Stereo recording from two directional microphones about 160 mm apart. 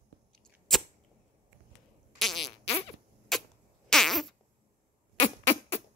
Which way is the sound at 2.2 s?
Centre (ahead or behind).